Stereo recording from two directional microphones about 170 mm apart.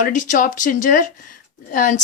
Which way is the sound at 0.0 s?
50° left (ahead or behind).